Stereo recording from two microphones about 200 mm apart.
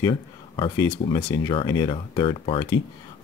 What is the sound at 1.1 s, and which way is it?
Speech, 10° left (ahead or behind).